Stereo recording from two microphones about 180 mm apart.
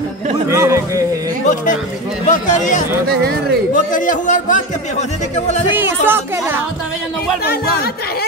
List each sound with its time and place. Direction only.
0.5 s a sound: 15° right (ahead or behind)
2.2 s speech: 45° left (ahead or behind)
6.0 s speech: 10° right (ahead or behind)